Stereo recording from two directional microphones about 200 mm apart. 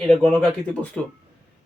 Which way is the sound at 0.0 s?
5° left (ahead or behind).